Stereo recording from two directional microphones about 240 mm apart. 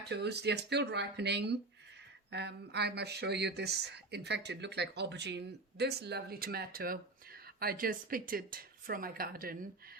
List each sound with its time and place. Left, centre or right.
0.0 s speech: right